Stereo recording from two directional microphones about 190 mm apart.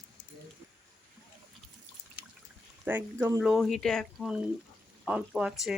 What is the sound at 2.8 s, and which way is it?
Speech, 10° right (ahead or behind).